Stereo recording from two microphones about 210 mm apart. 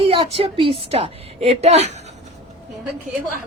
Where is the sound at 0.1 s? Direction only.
25° right (ahead or behind).